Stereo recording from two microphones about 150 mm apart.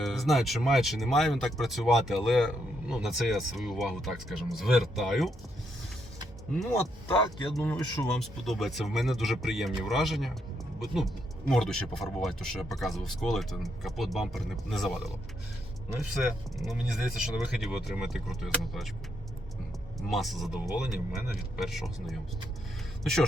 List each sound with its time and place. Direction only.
0.0 s speech: centre (ahead or behind)
6.6 s speech: 5° left (ahead or behind)
16.1 s speech: centre (ahead or behind)
20.0 s speech: centre (ahead or behind)